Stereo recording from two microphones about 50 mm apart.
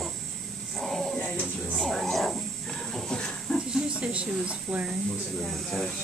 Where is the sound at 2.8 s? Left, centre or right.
Centre.